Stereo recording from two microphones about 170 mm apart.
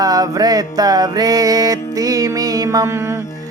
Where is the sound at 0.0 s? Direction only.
20° right (ahead or behind).